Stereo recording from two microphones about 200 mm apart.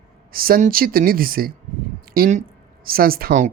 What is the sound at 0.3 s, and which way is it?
Speech, 45° right (ahead or behind).